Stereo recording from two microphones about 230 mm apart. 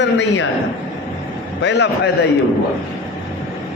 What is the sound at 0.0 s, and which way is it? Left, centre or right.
Speech, left.